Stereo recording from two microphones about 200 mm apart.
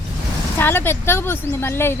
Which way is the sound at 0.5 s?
10° left (ahead or behind).